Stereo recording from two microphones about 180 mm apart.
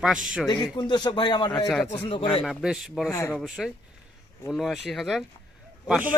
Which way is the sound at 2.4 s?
Centre (ahead or behind).